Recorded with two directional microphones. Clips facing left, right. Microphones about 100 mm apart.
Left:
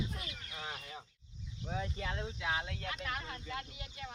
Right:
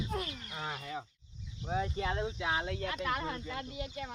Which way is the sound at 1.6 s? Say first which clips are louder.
Right 6 dB; 25° right (ahead or behind).